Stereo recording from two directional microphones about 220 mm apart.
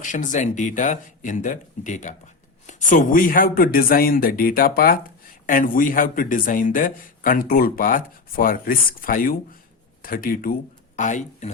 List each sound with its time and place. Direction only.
0.0 s speech: 35° left (ahead or behind)